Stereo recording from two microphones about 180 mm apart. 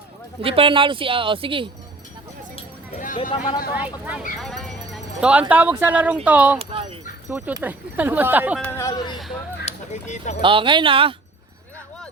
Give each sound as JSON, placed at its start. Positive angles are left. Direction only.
{"t": 0.4, "sound": "a woman's voice", "side_deg": -30}
{"t": 2.9, "sound": "a sound", "side_deg": 50}
{"t": 3.8, "sound": "speech", "side_deg": -10}
{"t": 4.4, "sound": "a sound", "side_deg": 0}
{"t": 5.2, "sound": "speech", "side_deg": -5}
{"t": 6.6, "sound": "speech", "side_deg": -30}
{"t": 7.3, "sound": "speech", "side_deg": -10}
{"t": 8.6, "sound": "speech", "side_deg": 15}
{"t": 9.6, "sound": "speech", "side_deg": 40}
{"t": 10.4, "sound": "a woman's voice", "side_deg": -30}